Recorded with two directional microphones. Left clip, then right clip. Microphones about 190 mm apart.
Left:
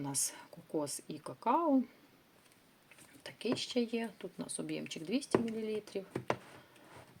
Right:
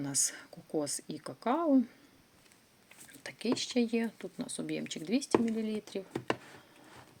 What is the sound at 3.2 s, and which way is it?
Speech, 20° right (ahead or behind).